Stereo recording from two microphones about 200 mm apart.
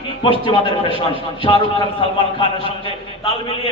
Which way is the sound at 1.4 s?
25° left (ahead or behind).